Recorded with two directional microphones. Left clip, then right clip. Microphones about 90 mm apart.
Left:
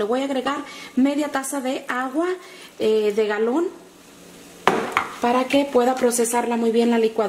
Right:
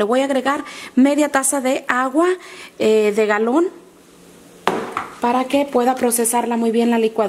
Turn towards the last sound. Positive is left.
turn(degrees=-40)  # may be behind; listen again after turning